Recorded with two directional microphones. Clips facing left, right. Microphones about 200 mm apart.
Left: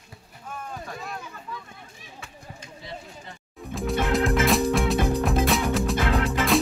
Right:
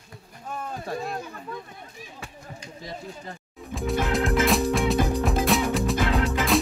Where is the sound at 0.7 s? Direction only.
35° right (ahead or behind).